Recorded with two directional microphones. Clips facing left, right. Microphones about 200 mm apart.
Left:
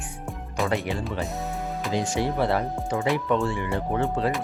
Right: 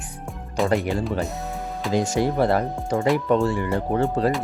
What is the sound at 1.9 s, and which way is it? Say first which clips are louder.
Speech: right 5 dB; 45° right (ahead or behind).